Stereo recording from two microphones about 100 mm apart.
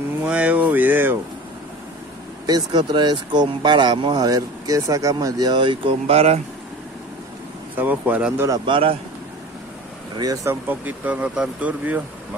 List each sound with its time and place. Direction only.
0.2 s a sound: 15° right (ahead or behind)
2.4 s speech: 45° right (ahead or behind)
4.2 s speech: 40° right (ahead or behind)
5.5 s speech: 55° right (ahead or behind); by 6.4 s 90° right
7.7 s speech: 15° right (ahead or behind)
8.6 s speech: 60° right (ahead or behind)
10.1 s speech: 35° right (ahead or behind)
10.5 s speech: 15° right (ahead or behind)